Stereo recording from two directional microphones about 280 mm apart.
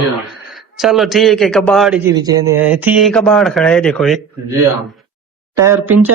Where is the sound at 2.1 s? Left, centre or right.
Centre.